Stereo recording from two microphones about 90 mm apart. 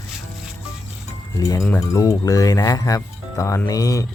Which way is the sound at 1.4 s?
40° left (ahead or behind).